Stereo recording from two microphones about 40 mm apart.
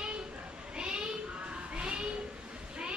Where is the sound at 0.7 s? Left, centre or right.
Right.